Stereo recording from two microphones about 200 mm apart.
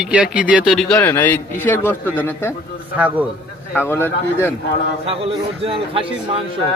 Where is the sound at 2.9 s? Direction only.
10° right (ahead or behind).